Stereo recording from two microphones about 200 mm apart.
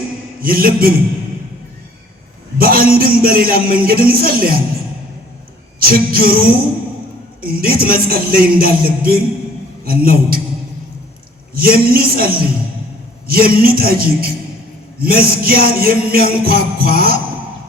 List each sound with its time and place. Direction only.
0.4 s music: 50° right (ahead or behind)
2.6 s music: 50° right (ahead or behind)
5.8 s music: 50° right (ahead or behind)
11.5 s music: 50° right (ahead or behind)